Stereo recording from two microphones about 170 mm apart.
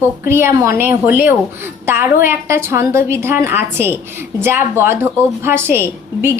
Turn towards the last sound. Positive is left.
turn(degrees=-15)  # may be behind; listen again after turning